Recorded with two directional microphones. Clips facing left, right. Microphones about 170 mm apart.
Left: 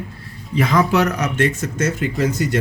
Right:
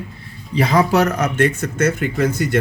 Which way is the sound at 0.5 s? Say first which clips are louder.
Right 1 dB; 35° right (ahead or behind).